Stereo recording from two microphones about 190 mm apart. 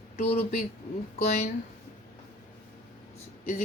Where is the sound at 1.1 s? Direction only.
35° left (ahead or behind).